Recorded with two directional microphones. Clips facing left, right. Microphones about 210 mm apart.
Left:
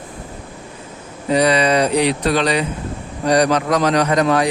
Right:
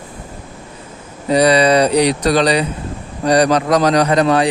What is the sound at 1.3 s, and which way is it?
Speech, 35° right (ahead or behind).